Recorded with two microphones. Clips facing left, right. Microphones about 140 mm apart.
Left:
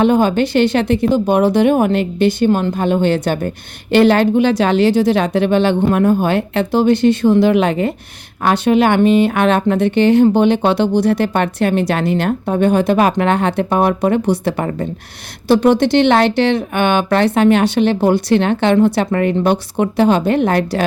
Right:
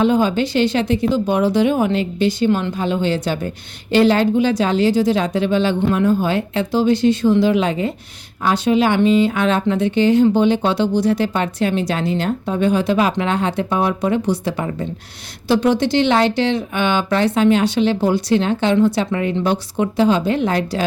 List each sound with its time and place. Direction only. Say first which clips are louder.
0.0 s speech: left 3 dB; 60° left (ahead or behind)
5.8 s speech: left 3 dB; 55° left (ahead or behind)